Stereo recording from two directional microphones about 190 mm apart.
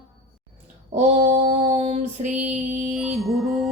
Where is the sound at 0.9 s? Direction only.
35° right (ahead or behind).